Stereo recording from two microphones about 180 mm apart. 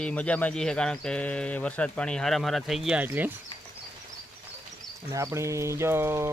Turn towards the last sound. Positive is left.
turn(degrees=-15)  # may be behind; listen again after turning